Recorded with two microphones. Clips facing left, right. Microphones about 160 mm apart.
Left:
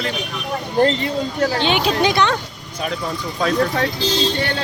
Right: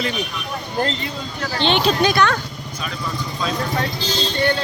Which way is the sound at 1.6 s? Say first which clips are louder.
Right 1 dB; 10° left (ahead or behind).